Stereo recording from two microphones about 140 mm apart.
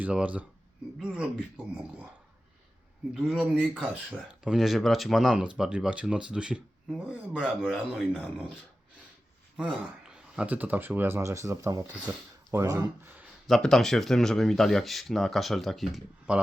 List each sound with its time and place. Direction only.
0.0 s speech: 10° right (ahead or behind)
3.2 s speech: 5° right (ahead or behind)
9.6 s speech: 5° right (ahead or behind)
13.5 s speech: centre (ahead or behind)